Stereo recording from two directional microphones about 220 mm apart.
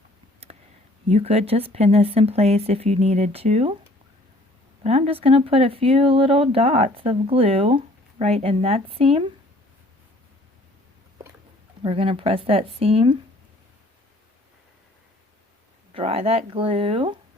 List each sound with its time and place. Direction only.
1.1 s speech: 25° right (ahead or behind)
4.8 s speech: 30° right (ahead or behind)
11.8 s speech: 25° right (ahead or behind)
15.9 s speech: 25° right (ahead or behind)